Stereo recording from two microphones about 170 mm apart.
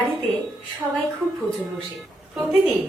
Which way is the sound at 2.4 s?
5° right (ahead or behind).